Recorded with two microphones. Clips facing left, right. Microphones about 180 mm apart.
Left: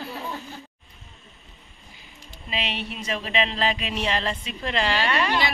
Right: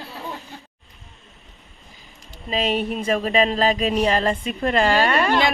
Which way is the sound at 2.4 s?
45° right (ahead or behind).